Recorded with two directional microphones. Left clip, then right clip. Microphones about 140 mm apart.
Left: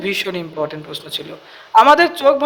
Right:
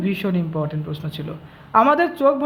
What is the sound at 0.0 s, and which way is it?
A man's voice, 25° left (ahead or behind).